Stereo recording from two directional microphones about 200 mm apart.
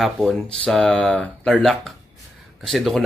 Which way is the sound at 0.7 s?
5° left (ahead or behind).